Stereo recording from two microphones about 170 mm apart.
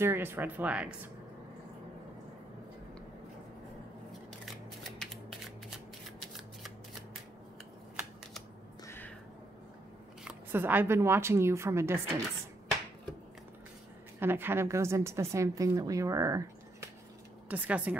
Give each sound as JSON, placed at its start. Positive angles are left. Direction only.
{"t": 0.0, "sound": "a woman's voice", "side_deg": -15}
{"t": 4.3, "sound": "shuffling cards", "side_deg": 0}
{"t": 7.9, "sound": "a sound", "side_deg": -5}
{"t": 8.8, "sound": "a sound", "side_deg": 15}
{"t": 10.2, "sound": "a woman's voice", "side_deg": -10}
{"t": 14.2, "sound": "a woman's voice", "side_deg": -10}
{"t": 17.5, "sound": "a woman's voice", "side_deg": -10}